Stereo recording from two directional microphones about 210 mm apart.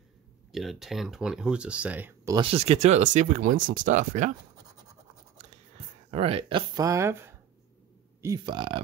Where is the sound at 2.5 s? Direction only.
30° right (ahead or behind).